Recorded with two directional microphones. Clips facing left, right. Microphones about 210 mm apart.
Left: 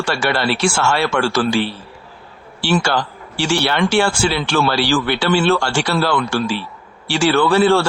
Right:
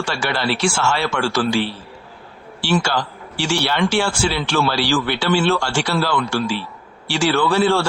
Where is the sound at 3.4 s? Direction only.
55° left (ahead or behind).